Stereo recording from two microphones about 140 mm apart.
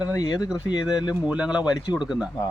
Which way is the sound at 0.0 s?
25° left (ahead or behind).